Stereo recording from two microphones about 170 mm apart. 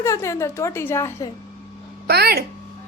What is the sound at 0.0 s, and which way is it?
A woman's voice, 15° left (ahead or behind).